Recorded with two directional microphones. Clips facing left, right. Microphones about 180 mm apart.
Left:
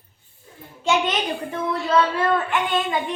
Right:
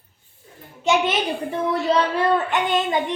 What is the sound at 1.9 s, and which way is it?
Speech, 20° right (ahead or behind).